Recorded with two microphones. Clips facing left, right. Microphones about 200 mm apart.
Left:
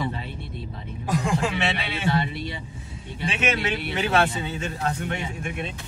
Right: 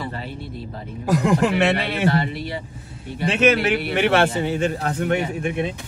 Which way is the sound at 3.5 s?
70° right (ahead or behind).